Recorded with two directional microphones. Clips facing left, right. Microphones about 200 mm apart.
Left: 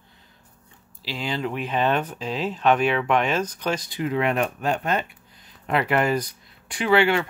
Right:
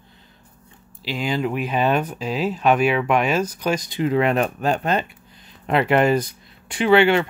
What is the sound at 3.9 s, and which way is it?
Speech, 30° right (ahead or behind).